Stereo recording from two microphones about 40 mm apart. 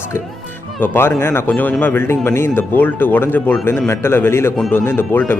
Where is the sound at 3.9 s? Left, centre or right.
Left.